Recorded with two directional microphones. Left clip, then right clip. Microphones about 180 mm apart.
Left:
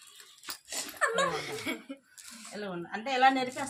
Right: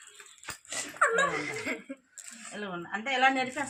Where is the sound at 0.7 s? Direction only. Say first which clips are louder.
Right 4 dB; 15° left (ahead or behind).